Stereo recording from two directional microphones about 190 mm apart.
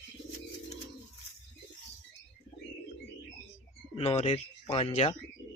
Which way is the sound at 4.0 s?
35° left (ahead or behind).